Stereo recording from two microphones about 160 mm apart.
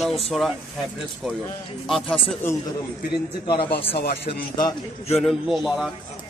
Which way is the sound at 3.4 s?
30° left (ahead or behind).